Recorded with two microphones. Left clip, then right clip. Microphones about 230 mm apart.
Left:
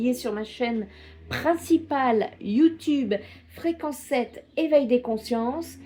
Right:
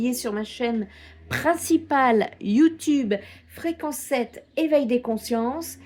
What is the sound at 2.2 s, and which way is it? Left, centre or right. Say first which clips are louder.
Speech: right 1 dB; right.